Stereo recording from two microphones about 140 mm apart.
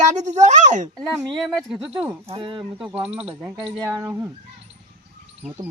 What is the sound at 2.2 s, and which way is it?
Speech, 40° right (ahead or behind).